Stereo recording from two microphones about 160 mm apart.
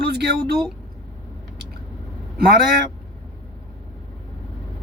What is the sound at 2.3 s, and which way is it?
Speech, 85° right.